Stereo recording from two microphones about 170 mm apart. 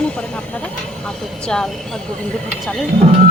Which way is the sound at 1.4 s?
5° left (ahead or behind).